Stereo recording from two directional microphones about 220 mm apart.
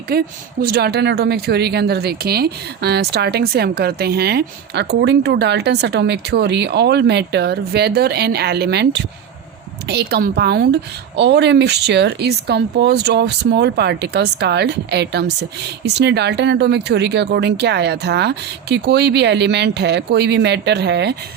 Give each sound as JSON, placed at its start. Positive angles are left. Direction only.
{"t": 0.1, "sound": "speech", "side_deg": -45}